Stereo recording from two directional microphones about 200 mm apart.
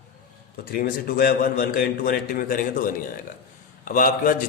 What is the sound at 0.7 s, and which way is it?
A man's voice, 45° left (ahead or behind).